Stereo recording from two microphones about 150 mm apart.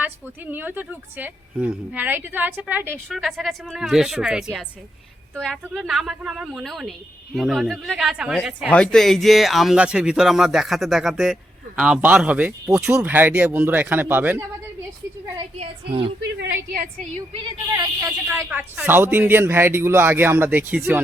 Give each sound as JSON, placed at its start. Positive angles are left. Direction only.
{"t": 0.0, "sound": "speech", "side_deg": -10}
{"t": 3.1, "sound": "speech", "side_deg": 0}
{"t": 15.5, "sound": "a woman's voice", "side_deg": -40}
{"t": 16.7, "sound": "a woman's voice", "side_deg": -65}
{"t": 17.2, "sound": "a woman's voice", "side_deg": -35}
{"t": 17.7, "sound": "speech", "side_deg": -25}
{"t": 18.3, "sound": "speech", "side_deg": -10}